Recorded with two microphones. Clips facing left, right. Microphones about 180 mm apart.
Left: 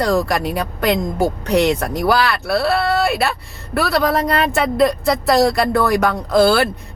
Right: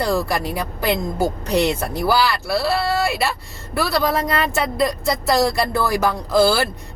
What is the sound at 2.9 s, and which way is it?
Speech, centre (ahead or behind).